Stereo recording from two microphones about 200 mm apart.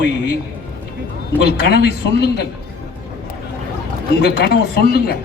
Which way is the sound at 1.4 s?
55° left (ahead or behind).